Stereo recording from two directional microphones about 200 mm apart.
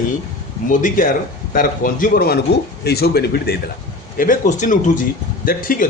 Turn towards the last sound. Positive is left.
turn(degrees=45)  # may be behind; listen again after turning